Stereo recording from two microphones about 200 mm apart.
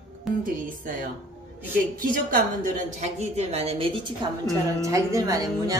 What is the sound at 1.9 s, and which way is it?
A woman's voice, 45° right (ahead or behind).